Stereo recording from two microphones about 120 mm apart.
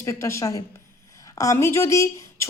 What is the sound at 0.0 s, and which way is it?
A woman's voice, 25° left (ahead or behind).